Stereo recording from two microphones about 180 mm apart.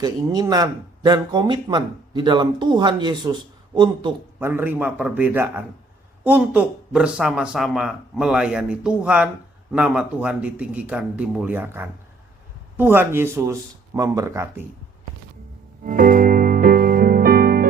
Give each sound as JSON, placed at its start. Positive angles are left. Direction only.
{"t": 0.0, "sound": "speech", "side_deg": -20}
{"t": 4.4, "sound": "a man's voice", "side_deg": -10}
{"t": 15.8, "sound": "music", "side_deg": -45}